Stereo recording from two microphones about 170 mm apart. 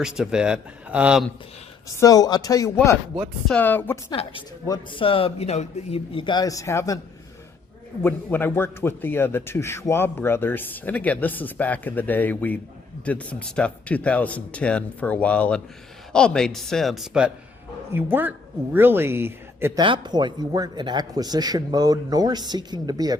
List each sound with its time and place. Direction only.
0.0 s a man's voice: 5° right (ahead or behind)
2.0 s a man's voice: 20° left (ahead or behind)
4.1 s a man's voice: 30° left (ahead or behind)
8.0 s a man's voice: 10° left (ahead or behind); by 19.8 s 15° right (ahead or behind)
19.8 s a man's voice: 25° right (ahead or behind)